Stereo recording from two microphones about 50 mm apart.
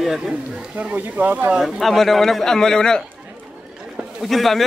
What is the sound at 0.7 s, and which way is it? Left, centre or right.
Speech, right.